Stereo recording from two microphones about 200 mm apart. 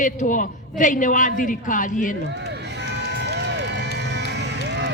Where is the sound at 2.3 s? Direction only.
55° right (ahead or behind).